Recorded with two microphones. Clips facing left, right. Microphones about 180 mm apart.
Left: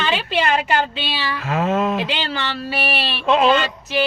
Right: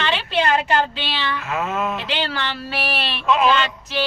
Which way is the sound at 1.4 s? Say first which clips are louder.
Left 7 dB; 35° left (ahead or behind).